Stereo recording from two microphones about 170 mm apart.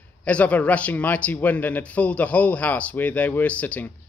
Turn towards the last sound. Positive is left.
turn(degrees=10)  # may be behind; listen again after turning